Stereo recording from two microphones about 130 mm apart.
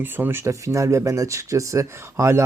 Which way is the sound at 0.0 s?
15° right (ahead or behind).